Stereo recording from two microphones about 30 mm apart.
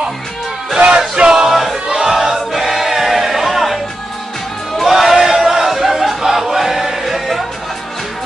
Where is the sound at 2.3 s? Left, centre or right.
Centre.